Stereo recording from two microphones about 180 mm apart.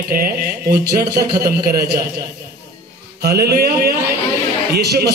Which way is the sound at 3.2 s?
60° right (ahead or behind).